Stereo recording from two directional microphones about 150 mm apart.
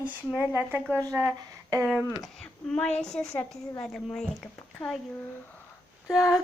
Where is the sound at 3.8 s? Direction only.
5° left (ahead or behind).